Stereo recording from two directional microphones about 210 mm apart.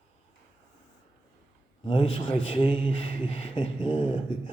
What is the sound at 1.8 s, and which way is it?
Speech, 25° left (ahead or behind).